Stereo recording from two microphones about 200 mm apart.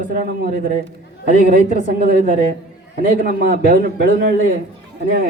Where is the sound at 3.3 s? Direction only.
45° right (ahead or behind).